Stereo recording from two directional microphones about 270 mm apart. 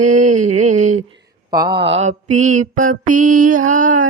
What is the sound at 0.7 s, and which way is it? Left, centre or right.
Mantra, right.